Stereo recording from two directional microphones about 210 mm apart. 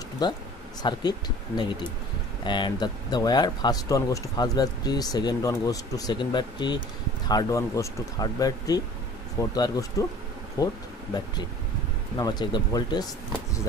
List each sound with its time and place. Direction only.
0.2 s speech: 20° left (ahead or behind)
12.2 s speech: 20° left (ahead or behind)